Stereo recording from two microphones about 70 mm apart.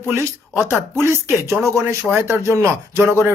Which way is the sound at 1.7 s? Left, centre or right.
Right.